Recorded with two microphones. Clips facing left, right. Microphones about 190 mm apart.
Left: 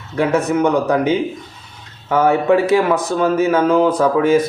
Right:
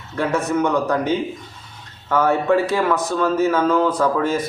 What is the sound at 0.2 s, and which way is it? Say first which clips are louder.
Speech: left 4 dB; 10° left (ahead or behind).